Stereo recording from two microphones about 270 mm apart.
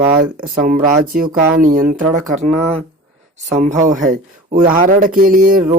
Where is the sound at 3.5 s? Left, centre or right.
Right.